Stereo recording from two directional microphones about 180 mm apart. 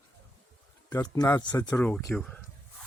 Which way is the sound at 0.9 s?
20° left (ahead or behind).